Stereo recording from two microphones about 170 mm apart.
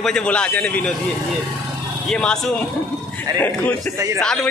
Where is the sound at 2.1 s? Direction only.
5° left (ahead or behind).